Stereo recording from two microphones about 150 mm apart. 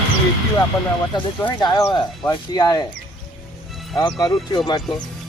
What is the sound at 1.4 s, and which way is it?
Speech, 30° left (ahead or behind).